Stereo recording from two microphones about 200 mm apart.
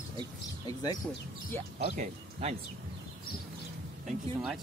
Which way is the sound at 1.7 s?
35° right (ahead or behind).